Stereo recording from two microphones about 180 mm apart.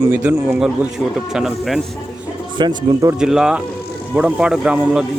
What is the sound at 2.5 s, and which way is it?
Speech, 20° right (ahead or behind).